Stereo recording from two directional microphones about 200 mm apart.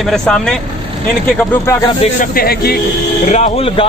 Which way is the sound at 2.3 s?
50° left (ahead or behind).